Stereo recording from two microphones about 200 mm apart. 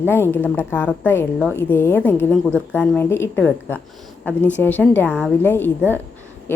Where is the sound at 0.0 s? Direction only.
10° left (ahead or behind).